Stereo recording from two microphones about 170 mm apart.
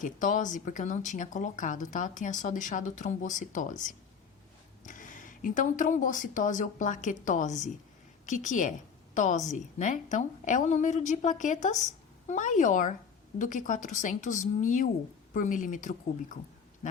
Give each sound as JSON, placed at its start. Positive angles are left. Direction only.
{"t": 0.0, "sound": "speech", "side_deg": 50}